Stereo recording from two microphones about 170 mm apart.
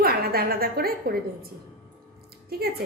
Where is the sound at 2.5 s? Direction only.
65° right (ahead or behind).